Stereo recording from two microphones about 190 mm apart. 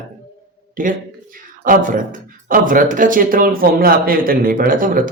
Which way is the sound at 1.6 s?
45° right (ahead or behind).